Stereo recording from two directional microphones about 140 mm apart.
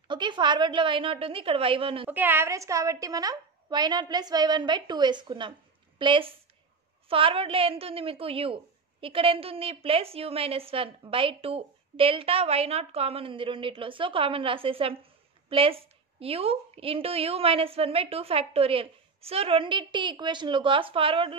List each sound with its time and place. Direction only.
0.1 s a woman's voice: 35° right (ahead or behind)
2.0 s a woman's voice: 15° right (ahead or behind); by 21.4 s 40° right (ahead or behind)